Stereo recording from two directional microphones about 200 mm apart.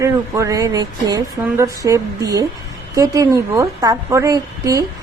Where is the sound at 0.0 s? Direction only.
15° right (ahead or behind).